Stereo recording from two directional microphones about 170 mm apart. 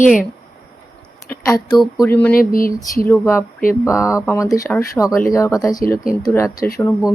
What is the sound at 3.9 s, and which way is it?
Speech, 5° right (ahead or behind).